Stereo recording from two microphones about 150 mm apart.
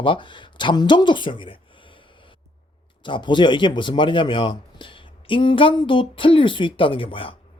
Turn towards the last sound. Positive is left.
turn(degrees=35)  # may be behind; listen again after turning